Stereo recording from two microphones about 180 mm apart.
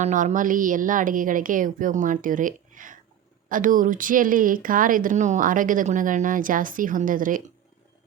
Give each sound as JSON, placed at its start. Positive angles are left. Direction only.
{"t": 0.0, "sound": "speech", "side_deg": -40}